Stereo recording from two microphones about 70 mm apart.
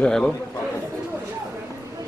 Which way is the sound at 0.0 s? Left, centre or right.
Centre.